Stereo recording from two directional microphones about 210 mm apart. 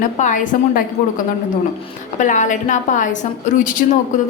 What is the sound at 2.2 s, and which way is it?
A woman's voice, 35° left (ahead or behind).